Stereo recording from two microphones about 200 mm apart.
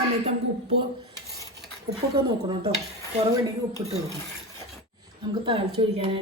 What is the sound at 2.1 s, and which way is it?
A woman's voice, 25° right (ahead or behind).